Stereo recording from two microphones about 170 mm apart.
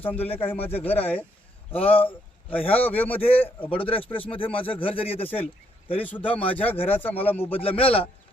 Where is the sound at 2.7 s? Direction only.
10° left (ahead or behind).